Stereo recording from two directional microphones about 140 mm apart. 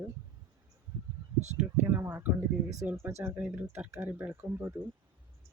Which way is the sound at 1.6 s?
15° right (ahead or behind).